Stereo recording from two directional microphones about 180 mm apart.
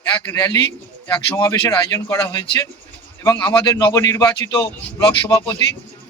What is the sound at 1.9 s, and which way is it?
Speech, 15° left (ahead or behind).